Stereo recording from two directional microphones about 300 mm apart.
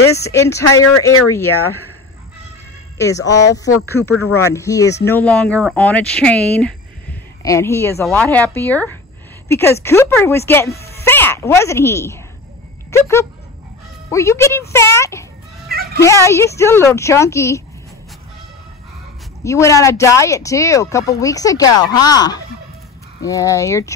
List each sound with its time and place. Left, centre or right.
0.0 s speech: centre
3.0 s speech: centre
15.7 s cat: right
16.3 s speech: centre
19.4 s speech: centre